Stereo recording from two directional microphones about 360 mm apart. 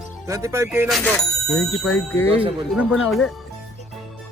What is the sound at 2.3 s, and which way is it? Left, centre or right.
Speech, centre.